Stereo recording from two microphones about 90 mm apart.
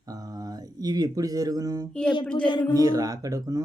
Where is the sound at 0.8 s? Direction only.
45° right (ahead or behind).